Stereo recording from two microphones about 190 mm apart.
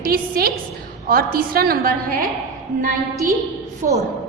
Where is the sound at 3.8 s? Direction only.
40° right (ahead or behind).